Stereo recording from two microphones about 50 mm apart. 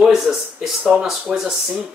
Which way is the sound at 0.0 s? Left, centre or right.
Centre.